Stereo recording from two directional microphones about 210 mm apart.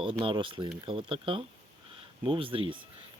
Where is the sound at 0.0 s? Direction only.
25° right (ahead or behind).